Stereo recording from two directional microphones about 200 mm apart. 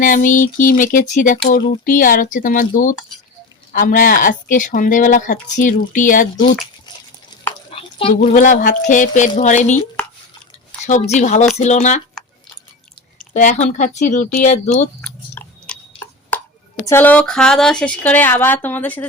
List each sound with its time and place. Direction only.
0.0 s speech: 40° left (ahead or behind)
7.7 s a sound: 25° left (ahead or behind)
8.2 s speech: 40° left (ahead or behind)
10.8 s speech: 35° left (ahead or behind)
13.3 s speech: 35° left (ahead or behind)
15.0 s chewing: 5° left (ahead or behind)
16.3 s chopping: 10° left (ahead or behind)
16.8 s speech: 10° left (ahead or behind)